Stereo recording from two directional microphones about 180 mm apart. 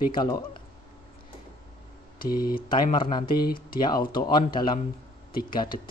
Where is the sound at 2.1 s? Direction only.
55° left (ahead or behind).